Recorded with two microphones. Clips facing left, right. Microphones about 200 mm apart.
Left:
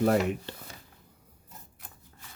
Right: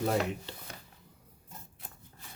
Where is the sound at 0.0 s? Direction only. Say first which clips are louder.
Left 5 dB; 60° left (ahead or behind).